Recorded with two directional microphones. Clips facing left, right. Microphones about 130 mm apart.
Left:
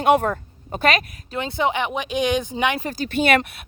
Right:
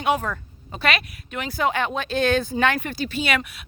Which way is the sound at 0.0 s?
55° left (ahead or behind).